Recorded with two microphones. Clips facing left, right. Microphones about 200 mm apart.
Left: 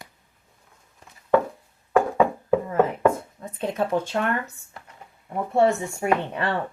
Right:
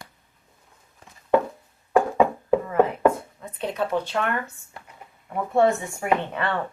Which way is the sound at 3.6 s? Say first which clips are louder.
Left 1 dB; 50° left (ahead or behind).